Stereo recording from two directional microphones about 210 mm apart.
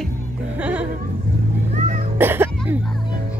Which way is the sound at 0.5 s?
5° right (ahead or behind).